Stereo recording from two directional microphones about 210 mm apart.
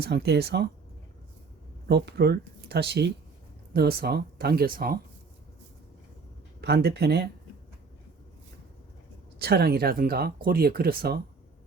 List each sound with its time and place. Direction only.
0.0 s speech: 50° right (ahead or behind)
1.9 s speech: 50° right (ahead or behind)
6.6 s speech: 50° right (ahead or behind)
9.4 s speech: 50° right (ahead or behind)